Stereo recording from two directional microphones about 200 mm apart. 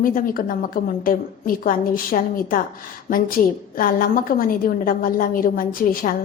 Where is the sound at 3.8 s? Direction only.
45° left (ahead or behind).